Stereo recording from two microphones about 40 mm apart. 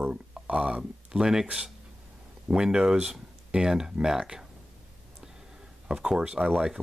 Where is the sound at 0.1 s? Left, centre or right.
Right.